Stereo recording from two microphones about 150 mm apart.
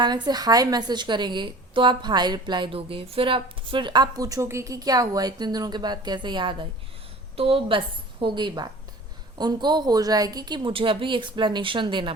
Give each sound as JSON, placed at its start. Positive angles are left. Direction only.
{"t": 0.0, "sound": "a woman's voice", "side_deg": -30}